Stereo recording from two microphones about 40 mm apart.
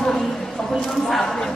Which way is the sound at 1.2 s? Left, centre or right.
Centre.